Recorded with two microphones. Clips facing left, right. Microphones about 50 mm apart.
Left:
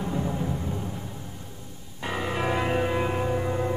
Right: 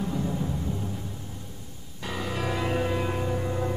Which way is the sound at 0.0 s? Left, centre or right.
Centre.